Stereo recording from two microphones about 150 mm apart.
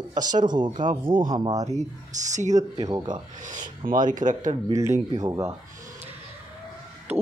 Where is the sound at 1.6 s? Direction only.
50° right (ahead or behind).